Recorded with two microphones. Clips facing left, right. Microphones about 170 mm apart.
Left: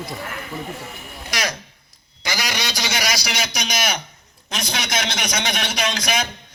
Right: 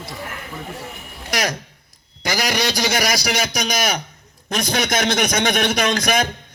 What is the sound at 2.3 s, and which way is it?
A man's voice, 50° right (ahead or behind).